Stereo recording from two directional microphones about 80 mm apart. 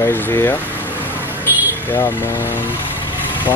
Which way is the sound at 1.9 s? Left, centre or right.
Left.